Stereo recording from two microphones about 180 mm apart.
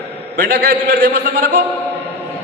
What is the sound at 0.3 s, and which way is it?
A man's voice, 65° right (ahead or behind).